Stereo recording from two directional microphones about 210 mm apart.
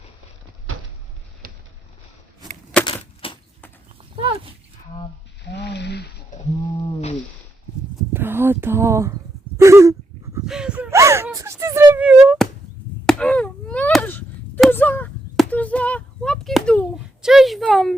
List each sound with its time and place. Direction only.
2.8 s a sound: 25° left (ahead or behind)
4.1 s dog: 25° right (ahead or behind)
5.5 s a sound: 55° left (ahead or behind)
8.1 s speech: 10° right (ahead or behind)
9.6 s dog: 15° right (ahead or behind)
10.4 s gasp: 5° right (ahead or behind)
11.3 s music: 15° right (ahead or behind)
13.1 s chop: 5° left (ahead or behind)
17.2 s a sound: centre (ahead or behind)